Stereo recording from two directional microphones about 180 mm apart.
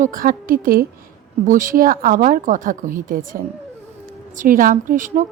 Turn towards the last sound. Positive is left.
turn(degrees=-45)  # may be behind; listen again after turning